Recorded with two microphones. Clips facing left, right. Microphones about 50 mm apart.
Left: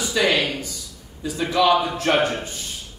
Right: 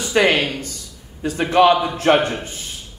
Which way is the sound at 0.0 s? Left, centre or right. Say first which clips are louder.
Right 4 dB; right.